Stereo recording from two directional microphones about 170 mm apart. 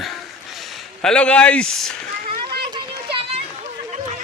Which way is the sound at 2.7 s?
30° right (ahead or behind).